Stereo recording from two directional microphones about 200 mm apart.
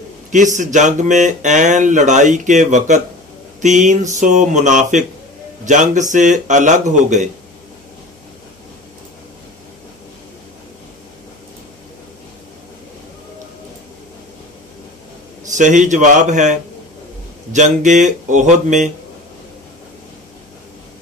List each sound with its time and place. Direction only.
0.3 s speech: 40° right (ahead or behind)
15.4 s speech: 40° right (ahead or behind)